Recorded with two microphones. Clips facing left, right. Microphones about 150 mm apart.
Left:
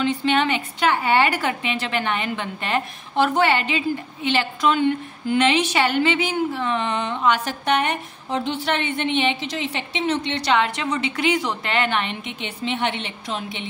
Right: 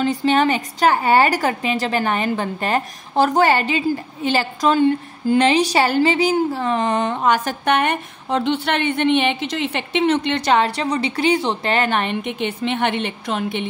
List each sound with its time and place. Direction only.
0.0 s a woman's voice: 40° right (ahead or behind); by 10.5 s 60° right (ahead or behind)
10.5 s a woman's voice: 35° right (ahead or behind); by 13.7 s 60° right (ahead or behind)